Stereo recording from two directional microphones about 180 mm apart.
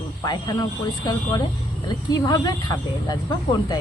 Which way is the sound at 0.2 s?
20° left (ahead or behind).